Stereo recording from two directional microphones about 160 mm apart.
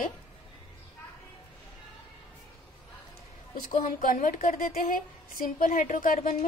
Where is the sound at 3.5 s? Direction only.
60° left (ahead or behind).